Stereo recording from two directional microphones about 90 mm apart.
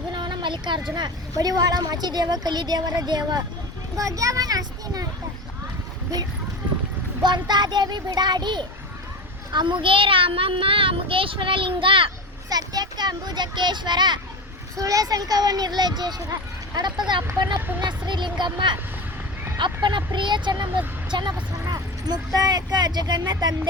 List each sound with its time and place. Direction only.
0.1 s a sound: 60° right (ahead or behind)
0.9 s a child's voice: 50° right (ahead or behind)
7.2 s a child's voice: 55° right (ahead or behind); by 12.1 s 75° right (ahead or behind)
12.5 s speech: 45° right (ahead or behind)
14.8 s speech: 40° right (ahead or behind)
17.7 s speech: 55° right (ahead or behind)
21.7 s speech: 45° right (ahead or behind)